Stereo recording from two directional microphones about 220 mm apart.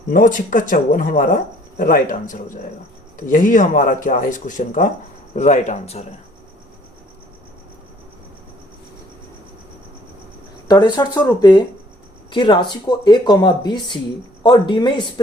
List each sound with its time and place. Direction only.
0.1 s speech: 40° left (ahead or behind)
10.7 s speech: 20° left (ahead or behind)